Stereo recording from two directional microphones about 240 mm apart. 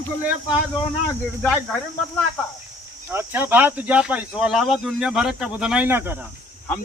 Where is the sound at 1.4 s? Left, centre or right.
Centre.